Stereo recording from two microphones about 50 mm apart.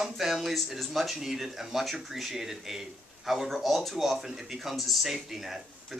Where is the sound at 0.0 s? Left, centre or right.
Centre.